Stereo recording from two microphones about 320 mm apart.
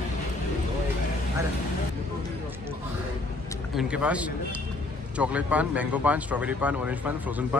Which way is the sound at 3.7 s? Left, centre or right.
Centre.